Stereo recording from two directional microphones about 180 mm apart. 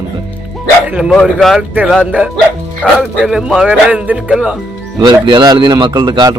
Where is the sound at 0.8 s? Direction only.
5° right (ahead or behind).